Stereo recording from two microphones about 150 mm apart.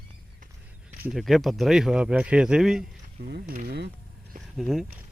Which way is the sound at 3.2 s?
90° right.